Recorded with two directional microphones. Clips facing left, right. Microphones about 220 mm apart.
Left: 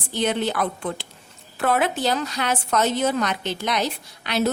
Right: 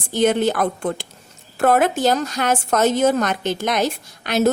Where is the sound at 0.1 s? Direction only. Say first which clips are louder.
Right 6 dB; 45° right (ahead or behind).